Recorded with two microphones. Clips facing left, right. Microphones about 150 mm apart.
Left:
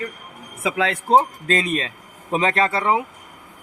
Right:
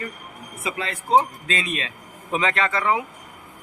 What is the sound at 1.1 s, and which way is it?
Speech, 45° left (ahead or behind).